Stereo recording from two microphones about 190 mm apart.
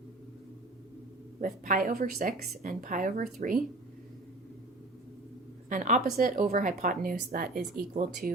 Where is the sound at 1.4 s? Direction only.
40° right (ahead or behind).